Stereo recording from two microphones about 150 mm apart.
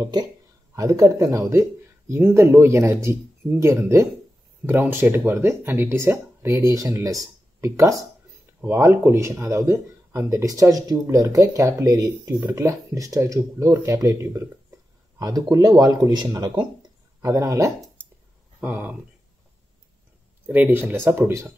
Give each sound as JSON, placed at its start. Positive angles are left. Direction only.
{"t": 0.0, "sound": "speech", "side_deg": -25}
{"t": 18.0, "sound": "a sound", "side_deg": 10}
{"t": 18.6, "sound": "speech", "side_deg": -10}
{"t": 20.4, "sound": "speech", "side_deg": -10}